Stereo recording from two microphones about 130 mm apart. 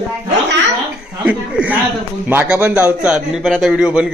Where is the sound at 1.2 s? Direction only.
10° right (ahead or behind).